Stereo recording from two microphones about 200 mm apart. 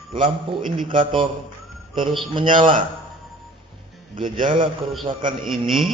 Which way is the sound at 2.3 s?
25° right (ahead or behind).